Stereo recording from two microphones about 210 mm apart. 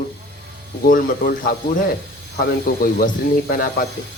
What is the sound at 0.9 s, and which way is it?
A man's voice, 40° left (ahead or behind).